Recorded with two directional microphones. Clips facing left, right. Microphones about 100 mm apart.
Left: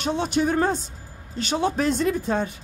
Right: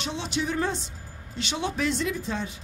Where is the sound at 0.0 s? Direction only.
50° left (ahead or behind).